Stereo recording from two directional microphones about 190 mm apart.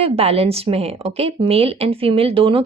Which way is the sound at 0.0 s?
30° right (ahead or behind).